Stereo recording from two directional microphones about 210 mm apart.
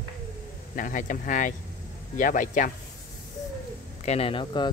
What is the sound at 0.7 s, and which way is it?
Speech, 40° left (ahead or behind).